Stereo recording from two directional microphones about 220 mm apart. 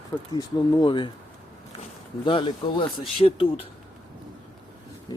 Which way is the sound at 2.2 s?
25° left (ahead or behind).